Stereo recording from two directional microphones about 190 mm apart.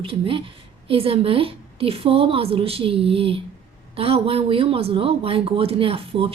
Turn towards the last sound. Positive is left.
turn(degrees=-30)  # may be behind; listen again after turning